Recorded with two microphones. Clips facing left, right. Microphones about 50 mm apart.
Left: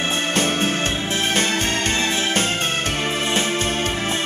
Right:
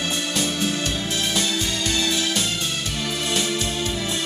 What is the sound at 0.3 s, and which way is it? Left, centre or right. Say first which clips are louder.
Music: left 5 dB; left.